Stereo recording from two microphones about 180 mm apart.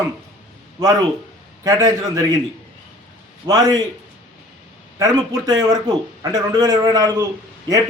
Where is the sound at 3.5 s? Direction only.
20° right (ahead or behind).